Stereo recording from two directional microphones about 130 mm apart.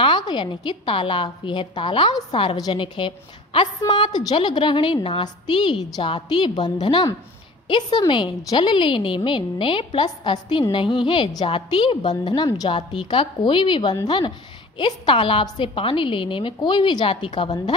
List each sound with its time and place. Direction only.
0.0 s a woman's voice: 35° left (ahead or behind)
2.8 s a woman's voice: 40° left (ahead or behind)